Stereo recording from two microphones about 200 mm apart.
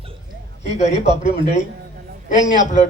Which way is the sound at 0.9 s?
25° right (ahead or behind).